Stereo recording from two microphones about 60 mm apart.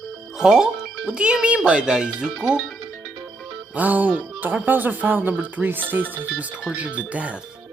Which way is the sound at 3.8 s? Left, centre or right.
Right.